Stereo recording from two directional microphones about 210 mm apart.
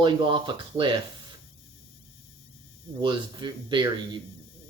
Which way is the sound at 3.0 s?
20° right (ahead or behind).